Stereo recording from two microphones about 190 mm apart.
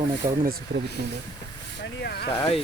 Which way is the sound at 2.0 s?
60° left (ahead or behind).